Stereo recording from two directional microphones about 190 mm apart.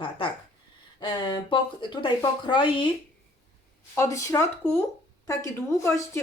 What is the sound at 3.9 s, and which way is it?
A woman's voice, 15° left (ahead or behind).